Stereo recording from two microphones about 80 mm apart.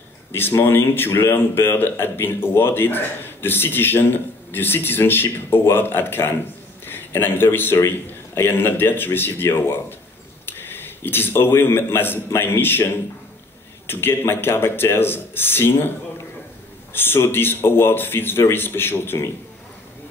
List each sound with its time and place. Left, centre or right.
0.3 s a man's voice: left
16.9 s a man's voice: left